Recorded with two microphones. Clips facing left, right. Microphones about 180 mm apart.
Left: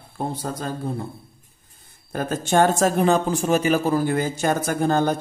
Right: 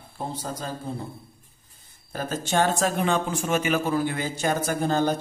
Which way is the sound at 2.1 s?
50° left (ahead or behind).